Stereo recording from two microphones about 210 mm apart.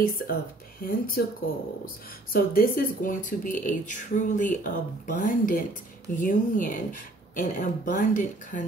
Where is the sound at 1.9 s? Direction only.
45° left (ahead or behind).